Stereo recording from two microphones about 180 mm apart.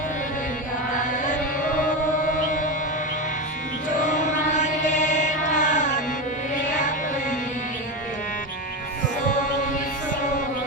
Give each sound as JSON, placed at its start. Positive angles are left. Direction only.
{"t": 1.2, "sound": "music", "side_deg": 45}
{"t": 3.8, "sound": "music", "side_deg": 45}